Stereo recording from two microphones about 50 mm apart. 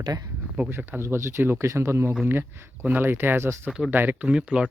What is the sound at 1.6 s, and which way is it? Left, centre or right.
Speech, right.